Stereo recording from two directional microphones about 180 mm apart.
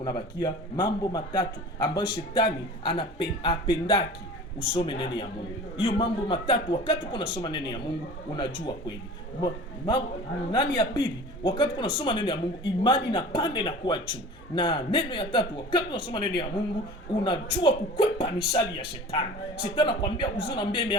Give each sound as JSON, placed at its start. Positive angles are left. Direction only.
{"t": 0.0, "sound": "speech", "side_deg": 25}
{"t": 9.4, "sound": "speech", "side_deg": 25}